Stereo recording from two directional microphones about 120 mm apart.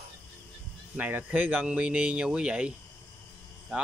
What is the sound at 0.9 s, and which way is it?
Speech, 15° right (ahead or behind).